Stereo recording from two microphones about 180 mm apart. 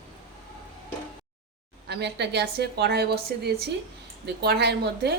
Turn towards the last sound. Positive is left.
turn(degrees=-65)  # may be behind; listen again after turning